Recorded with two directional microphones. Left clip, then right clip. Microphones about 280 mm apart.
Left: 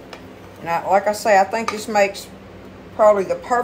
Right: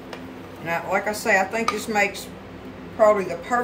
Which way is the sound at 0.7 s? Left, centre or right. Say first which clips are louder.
Left 6 dB; centre.